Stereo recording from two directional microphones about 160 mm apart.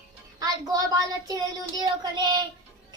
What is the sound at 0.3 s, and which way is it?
A child's voice, 20° right (ahead or behind).